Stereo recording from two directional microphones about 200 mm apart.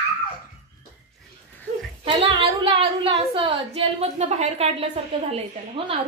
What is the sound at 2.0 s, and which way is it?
A woman's voice, 25° right (ahead or behind).